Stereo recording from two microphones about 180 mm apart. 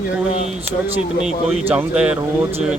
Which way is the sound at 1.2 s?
5° right (ahead or behind).